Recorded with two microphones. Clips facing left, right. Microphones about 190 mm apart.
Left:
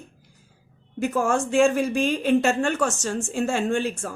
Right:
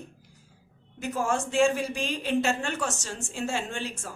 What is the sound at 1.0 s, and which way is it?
A woman's voice, 50° left (ahead or behind).